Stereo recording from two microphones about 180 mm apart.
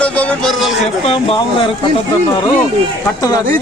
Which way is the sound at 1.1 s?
30° left (ahead or behind).